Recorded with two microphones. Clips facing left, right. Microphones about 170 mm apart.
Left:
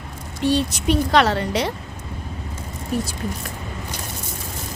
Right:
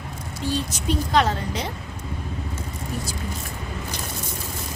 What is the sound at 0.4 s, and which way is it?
A woman's voice, 70° left (ahead or behind).